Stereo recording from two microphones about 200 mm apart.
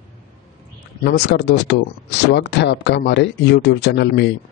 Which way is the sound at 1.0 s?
55° left (ahead or behind).